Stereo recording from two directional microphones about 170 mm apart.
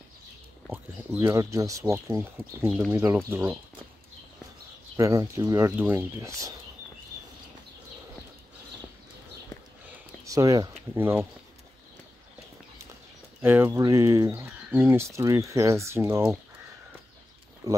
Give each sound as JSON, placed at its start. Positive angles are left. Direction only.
{"t": 1.2, "sound": "speech", "side_deg": -20}
{"t": 4.9, "sound": "speech", "side_deg": -20}
{"t": 10.2, "sound": "speech", "side_deg": -20}
{"t": 13.4, "sound": "speech", "side_deg": -10}
{"t": 17.6, "sound": "speech", "side_deg": -20}